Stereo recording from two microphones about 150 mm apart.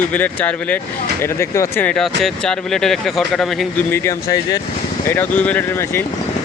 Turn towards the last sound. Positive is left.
turn(degrees=15)  # may be behind; listen again after turning